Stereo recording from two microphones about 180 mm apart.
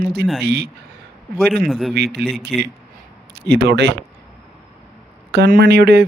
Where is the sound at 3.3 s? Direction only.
65° right (ahead or behind).